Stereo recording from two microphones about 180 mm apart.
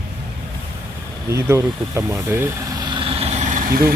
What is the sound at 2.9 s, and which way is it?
Vehicle, 30° right (ahead or behind).